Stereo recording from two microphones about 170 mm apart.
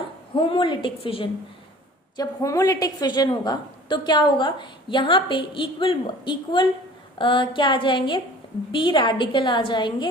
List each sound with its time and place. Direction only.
0.3 s a woman's voice: 30° left (ahead or behind)
2.1 s a woman's voice: 20° left (ahead or behind)